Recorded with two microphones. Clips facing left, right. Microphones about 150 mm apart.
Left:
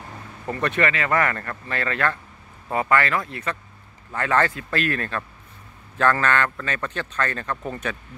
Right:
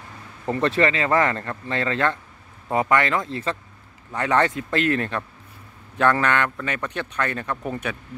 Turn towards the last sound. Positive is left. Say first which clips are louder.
# right 1 dB
turn(degrees=-15)  # may be behind; listen again after turning